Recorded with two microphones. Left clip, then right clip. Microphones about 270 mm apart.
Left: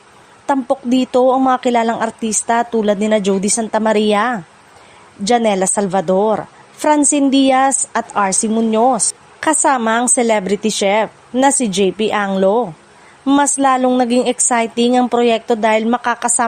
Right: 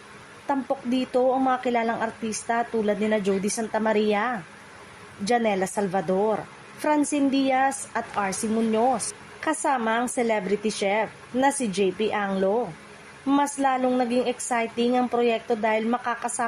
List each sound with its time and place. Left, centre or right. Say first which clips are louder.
0.4 s speech: left 10 dB; left